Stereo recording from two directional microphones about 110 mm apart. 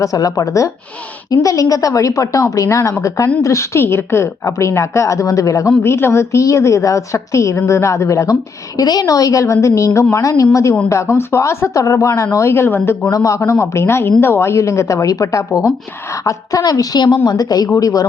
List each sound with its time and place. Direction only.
0.0 s a woman's voice: 30° left (ahead or behind)